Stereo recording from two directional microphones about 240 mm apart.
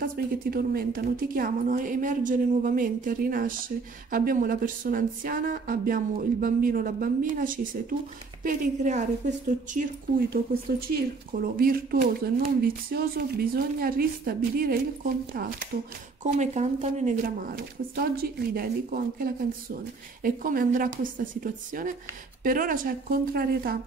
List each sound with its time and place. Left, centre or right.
0.0 s a woman's voice: right